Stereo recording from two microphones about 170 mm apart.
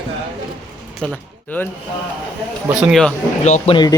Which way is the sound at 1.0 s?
10° left (ahead or behind).